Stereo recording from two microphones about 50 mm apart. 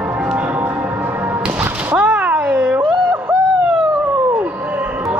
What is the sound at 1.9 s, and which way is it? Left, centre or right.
Cat, right.